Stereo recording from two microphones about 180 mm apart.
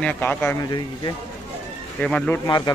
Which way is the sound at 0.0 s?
10° left (ahead or behind).